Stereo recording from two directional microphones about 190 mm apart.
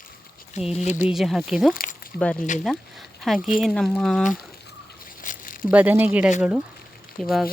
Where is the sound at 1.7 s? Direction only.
50° left (ahead or behind).